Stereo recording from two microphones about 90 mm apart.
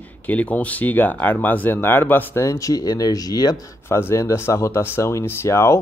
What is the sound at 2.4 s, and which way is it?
Speech, 35° left (ahead or behind).